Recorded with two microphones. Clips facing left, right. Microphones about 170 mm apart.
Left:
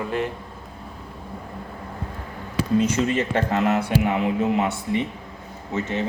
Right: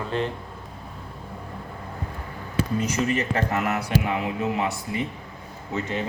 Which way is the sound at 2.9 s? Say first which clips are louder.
Left 2 dB; 30° left (ahead or behind).